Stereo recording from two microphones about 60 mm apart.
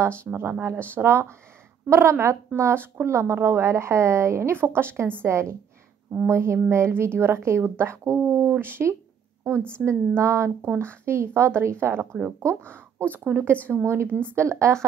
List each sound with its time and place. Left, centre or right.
0.3 s a woman's voice: right
9.8 s a woman's voice: right